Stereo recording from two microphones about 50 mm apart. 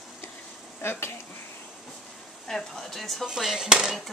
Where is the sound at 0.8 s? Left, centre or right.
Left.